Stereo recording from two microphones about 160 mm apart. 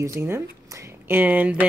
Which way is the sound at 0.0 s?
20° right (ahead or behind).